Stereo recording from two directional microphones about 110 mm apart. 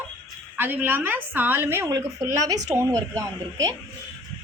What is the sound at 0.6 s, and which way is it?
A woman's voice, 20° right (ahead or behind).